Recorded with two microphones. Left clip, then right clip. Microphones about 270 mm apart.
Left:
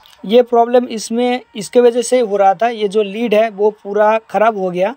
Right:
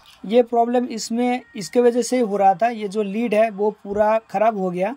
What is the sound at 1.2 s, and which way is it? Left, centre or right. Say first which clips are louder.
Speech: left 6 dB; centre.